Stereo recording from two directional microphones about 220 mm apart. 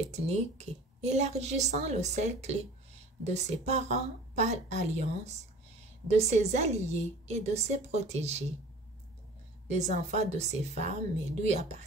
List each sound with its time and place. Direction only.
0.1 s a woman's voice: 30° right (ahead or behind)
9.7 s a woman's voice: 30° right (ahead or behind)